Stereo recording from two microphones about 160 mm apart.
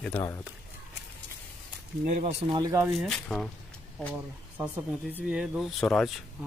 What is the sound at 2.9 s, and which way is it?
Speech, 5° left (ahead or behind).